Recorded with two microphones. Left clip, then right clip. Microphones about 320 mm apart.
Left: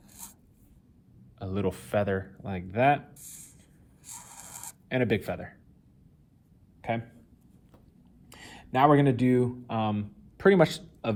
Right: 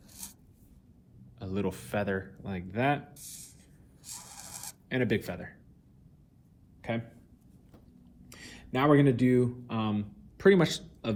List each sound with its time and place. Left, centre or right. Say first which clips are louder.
1.4 s speech: left 3 dB; left
4.9 s speech: left 3 dB; left
8.3 s speech: left 4 dB; left